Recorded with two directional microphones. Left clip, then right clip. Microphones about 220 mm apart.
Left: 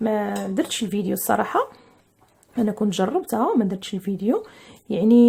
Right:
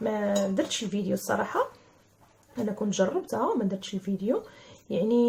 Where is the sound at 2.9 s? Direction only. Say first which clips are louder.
Left 4 dB; 45° left (ahead or behind).